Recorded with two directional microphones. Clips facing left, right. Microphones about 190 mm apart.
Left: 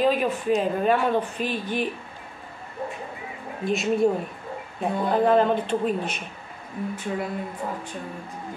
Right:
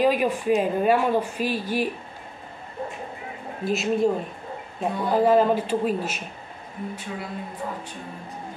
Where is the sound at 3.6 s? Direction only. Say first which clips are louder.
Left 1 dB; centre (ahead or behind).